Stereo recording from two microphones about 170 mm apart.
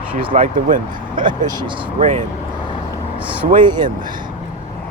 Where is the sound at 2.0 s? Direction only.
45° right (ahead or behind).